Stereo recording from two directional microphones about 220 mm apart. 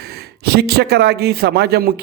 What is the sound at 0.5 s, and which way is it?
A man's voice, 45° right (ahead or behind).